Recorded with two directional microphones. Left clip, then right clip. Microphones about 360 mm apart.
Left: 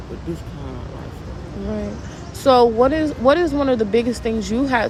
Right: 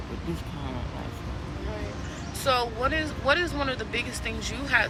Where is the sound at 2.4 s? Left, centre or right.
Centre.